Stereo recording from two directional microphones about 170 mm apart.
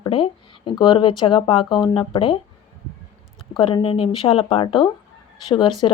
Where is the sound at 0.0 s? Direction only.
30° left (ahead or behind).